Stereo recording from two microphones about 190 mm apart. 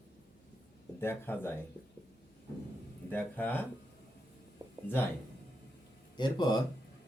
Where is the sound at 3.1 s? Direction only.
10° left (ahead or behind).